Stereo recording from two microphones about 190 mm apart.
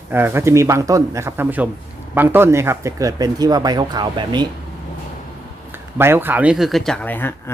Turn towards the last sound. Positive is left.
turn(degrees=10)  # may be behind; listen again after turning